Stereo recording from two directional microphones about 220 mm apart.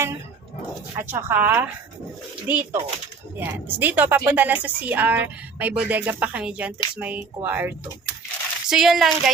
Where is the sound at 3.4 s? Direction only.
10° right (ahead or behind).